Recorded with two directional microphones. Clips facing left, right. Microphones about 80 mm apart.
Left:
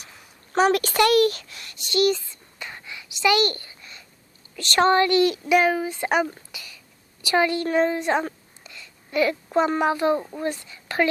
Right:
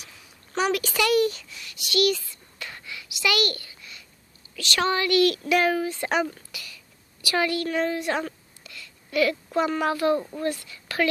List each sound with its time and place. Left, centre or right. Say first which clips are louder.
0.0 s a sound: left 2 dB; left
1.2 s a child's voice: left 4 dB; left
1.7 s whispering: left 2 dB; left
4.5 s a woman's voice: left 6 dB; left